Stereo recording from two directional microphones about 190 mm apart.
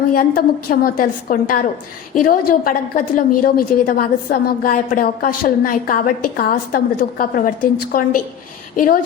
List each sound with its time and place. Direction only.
0.1 s a woman's voice: 50° left (ahead or behind)